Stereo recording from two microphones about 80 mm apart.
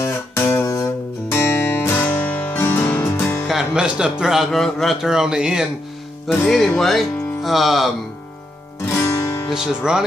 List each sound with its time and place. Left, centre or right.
0.0 s guitar: left
1.3 s music: left
3.4 s speech: centre
4.5 s a man's voice: centre
6.4 s a man's voice: centre
8.8 s music: left
9.5 s music: centre